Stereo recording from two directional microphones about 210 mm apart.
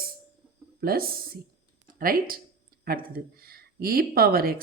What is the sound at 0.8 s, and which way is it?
Speech, 45° right (ahead or behind).